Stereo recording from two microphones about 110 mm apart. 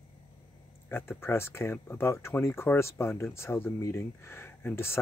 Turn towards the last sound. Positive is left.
turn(degrees=20)  # may be behind; listen again after turning